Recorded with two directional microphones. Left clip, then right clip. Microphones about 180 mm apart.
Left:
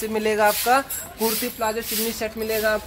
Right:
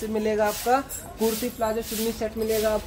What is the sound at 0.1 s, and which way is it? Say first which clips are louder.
Speech: left 4 dB; 20° left (ahead or behind).